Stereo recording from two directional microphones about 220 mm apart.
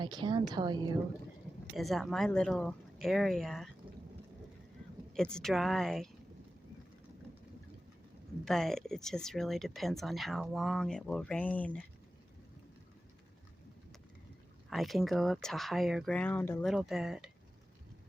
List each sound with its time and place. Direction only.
0.0 s a woman's voice: 20° right (ahead or behind)
1.7 s speech: centre (ahead or behind)
5.1 s speech: 5° left (ahead or behind)
8.4 s speech: centre (ahead or behind)
14.7 s speech: centre (ahead or behind)